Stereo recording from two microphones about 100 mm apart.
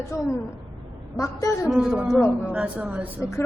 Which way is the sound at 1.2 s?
35° left (ahead or behind).